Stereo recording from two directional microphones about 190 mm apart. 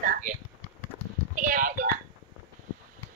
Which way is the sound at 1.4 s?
50° right (ahead or behind).